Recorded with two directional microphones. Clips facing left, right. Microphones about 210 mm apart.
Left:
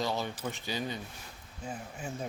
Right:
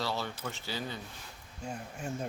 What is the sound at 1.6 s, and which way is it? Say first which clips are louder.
Speech: right 1 dB; centre (ahead or behind).